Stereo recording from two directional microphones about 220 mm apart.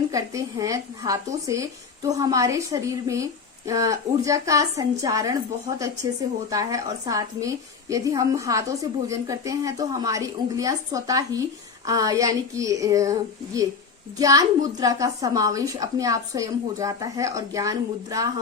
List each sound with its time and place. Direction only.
0.1 s a woman's voice: 15° right (ahead or behind)